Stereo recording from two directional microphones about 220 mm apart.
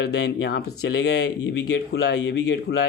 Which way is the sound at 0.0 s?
50° left (ahead or behind).